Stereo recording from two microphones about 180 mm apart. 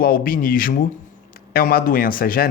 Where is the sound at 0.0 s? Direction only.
55° left (ahead or behind).